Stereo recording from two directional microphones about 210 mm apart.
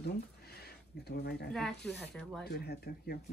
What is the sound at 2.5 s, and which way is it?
Speech, 50° left (ahead or behind).